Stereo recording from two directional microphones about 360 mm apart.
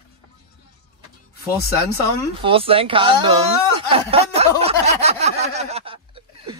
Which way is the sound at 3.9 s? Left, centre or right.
Centre.